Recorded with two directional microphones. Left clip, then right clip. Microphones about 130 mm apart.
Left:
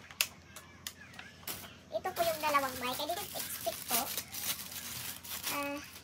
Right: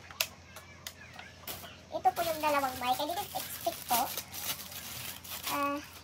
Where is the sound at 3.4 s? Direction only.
10° left (ahead or behind).